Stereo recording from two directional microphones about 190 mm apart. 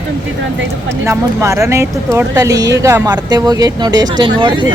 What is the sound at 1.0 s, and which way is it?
Speech, 15° right (ahead or behind).